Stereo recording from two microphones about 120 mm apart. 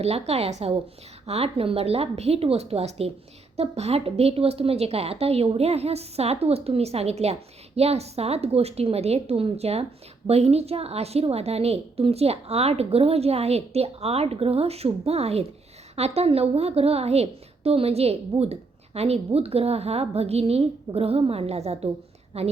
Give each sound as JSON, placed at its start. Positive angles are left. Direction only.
{"t": 0.0, "sound": "a woman's voice", "side_deg": -60}